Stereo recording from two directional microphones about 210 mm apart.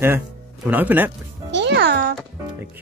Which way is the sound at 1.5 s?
55° right (ahead or behind).